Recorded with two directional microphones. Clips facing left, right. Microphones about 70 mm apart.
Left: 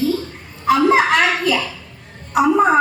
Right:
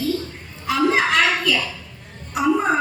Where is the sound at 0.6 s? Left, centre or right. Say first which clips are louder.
Left 5 dB; left.